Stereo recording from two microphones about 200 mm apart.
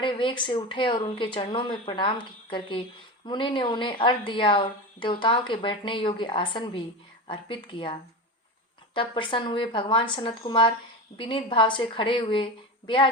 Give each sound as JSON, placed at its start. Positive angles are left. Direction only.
{"t": 0.0, "sound": "a woman's voice", "side_deg": 25}
{"t": 9.0, "sound": "a woman's voice", "side_deg": 25}